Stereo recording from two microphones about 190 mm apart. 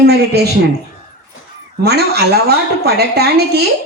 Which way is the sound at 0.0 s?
55° right (ahead or behind).